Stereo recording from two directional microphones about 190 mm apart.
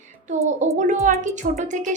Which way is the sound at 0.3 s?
40° right (ahead or behind).